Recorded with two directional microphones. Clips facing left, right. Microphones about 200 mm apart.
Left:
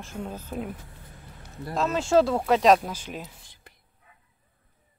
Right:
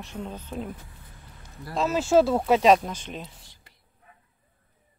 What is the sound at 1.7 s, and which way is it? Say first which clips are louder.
Speech: right 1 dB; centre (ahead or behind).